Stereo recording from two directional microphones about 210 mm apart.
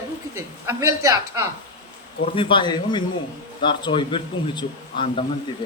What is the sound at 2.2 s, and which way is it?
Speech, 25° left (ahead or behind).